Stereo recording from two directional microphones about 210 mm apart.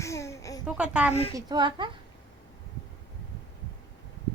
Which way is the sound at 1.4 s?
20° right (ahead or behind).